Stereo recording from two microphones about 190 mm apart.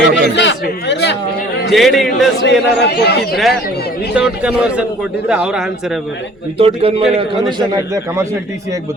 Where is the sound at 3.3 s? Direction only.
Centre (ahead or behind).